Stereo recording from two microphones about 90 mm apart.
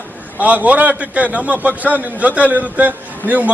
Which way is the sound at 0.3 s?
15° right (ahead or behind).